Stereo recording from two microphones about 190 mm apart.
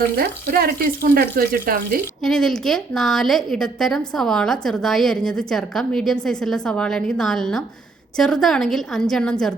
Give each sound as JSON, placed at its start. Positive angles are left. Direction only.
{"t": 0.2, "sound": "speech", "side_deg": -55}
{"t": 2.2, "sound": "a woman's voice", "side_deg": 0}